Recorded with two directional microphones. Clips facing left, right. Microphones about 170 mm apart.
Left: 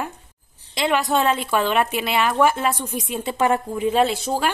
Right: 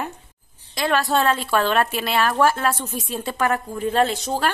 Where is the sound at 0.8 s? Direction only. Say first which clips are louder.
Even; 20° left (ahead or behind).